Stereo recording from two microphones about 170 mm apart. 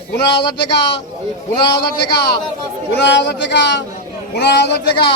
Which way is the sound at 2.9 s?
85° left.